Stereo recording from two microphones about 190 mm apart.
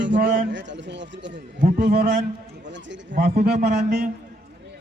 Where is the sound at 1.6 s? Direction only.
50° right (ahead or behind).